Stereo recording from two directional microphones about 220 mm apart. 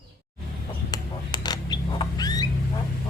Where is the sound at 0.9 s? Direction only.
20° left (ahead or behind).